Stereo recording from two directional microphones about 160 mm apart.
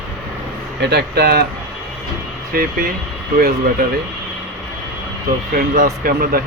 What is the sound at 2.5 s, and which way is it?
Speech, 70° right (ahead or behind).